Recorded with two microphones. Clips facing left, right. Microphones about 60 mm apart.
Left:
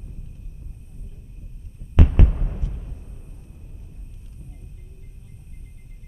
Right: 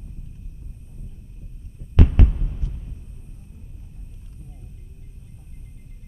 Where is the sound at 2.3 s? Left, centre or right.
Left.